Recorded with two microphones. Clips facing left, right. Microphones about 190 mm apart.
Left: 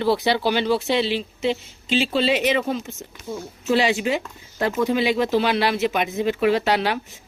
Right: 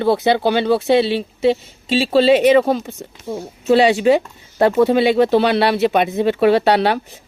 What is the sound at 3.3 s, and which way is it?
Speech, 70° right (ahead or behind).